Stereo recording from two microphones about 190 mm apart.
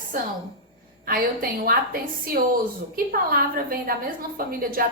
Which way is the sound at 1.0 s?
50° right (ahead or behind).